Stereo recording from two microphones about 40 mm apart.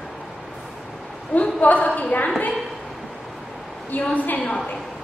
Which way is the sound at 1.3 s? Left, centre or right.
Left.